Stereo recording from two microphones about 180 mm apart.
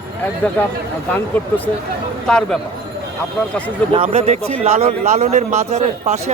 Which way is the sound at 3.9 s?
35° right (ahead or behind).